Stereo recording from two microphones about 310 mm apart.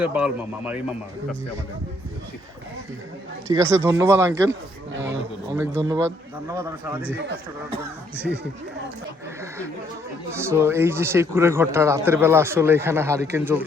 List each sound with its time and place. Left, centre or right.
0.0 s speech: centre
3.5 s speech: centre
7.0 s speech: right
8.1 s speech: centre
10.3 s speech: centre